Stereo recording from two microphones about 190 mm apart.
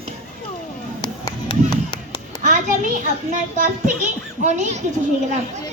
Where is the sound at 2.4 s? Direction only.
40° right (ahead or behind).